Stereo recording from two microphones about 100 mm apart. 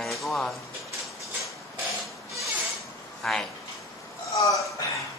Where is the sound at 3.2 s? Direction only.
5° left (ahead or behind).